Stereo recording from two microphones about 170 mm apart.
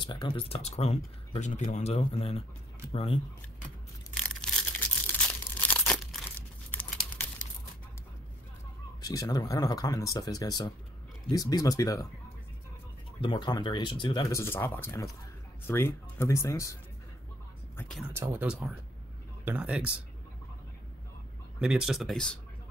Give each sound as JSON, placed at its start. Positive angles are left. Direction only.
{"t": 0.0, "sound": "speech", "side_deg": 30}
{"t": 4.1, "sound": "a sound", "side_deg": 5}
{"t": 6.7, "sound": "crumpling", "side_deg": 10}
{"t": 9.0, "sound": "speech", "side_deg": 20}
{"t": 13.2, "sound": "speech", "side_deg": 30}
{"t": 17.7, "sound": "a sound", "side_deg": 5}
{"t": 18.0, "sound": "speech", "side_deg": -15}
{"t": 21.5, "sound": "speech", "side_deg": -5}